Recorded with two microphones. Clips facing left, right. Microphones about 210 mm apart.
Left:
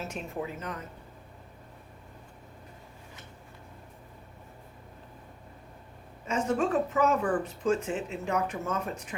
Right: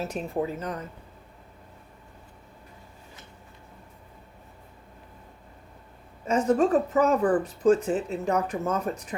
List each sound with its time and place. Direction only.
0.0 s speech: 35° right (ahead or behind)
6.2 s speech: 40° right (ahead or behind)